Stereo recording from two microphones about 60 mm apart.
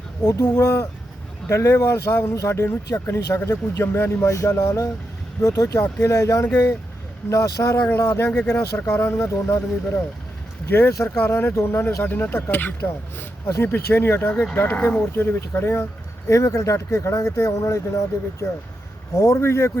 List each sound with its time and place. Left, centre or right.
0.3 s speech: left
1.5 s speech: left
3.2 s speech: left
4.3 s speech: left
7.9 s speech: left
8.3 s speech: centre
9.0 s speech: left
12.0 s speech: left
14.5 s speech: left
15.1 s speech: left
16.3 s speech: left